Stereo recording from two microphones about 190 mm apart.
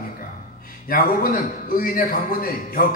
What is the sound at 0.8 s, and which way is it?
A man's voice, 50° left (ahead or behind).